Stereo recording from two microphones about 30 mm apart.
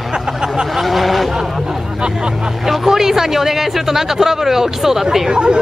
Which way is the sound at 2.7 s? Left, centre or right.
Centre.